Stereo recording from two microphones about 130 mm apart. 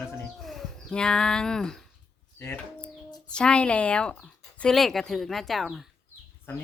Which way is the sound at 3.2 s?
5° left (ahead or behind).